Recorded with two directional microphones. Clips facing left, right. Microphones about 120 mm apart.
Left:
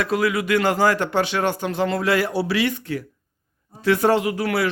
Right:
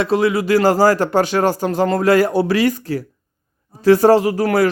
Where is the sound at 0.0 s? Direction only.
30° right (ahead or behind).